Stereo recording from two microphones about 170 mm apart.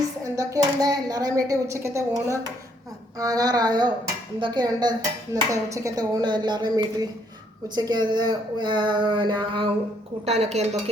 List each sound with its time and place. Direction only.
0.3 s speech: 20° right (ahead or behind); by 10.9 s 40° right (ahead or behind)